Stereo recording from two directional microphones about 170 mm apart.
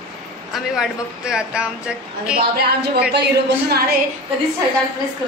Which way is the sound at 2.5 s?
70° right (ahead or behind).